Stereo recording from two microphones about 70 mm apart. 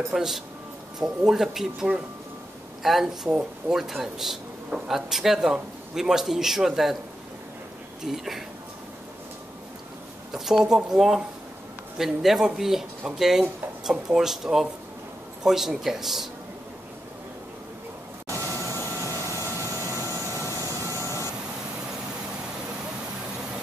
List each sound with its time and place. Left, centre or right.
0.1 s speech: centre
3.3 s speech: centre
3.7 s speech: centre
8.0 s speech: centre
10.3 s speech: centre
18.3 s vacuum cleaner: left